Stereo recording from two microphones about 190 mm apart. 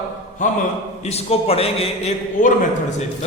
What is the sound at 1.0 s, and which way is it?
A man's voice, 35° left (ahead or behind).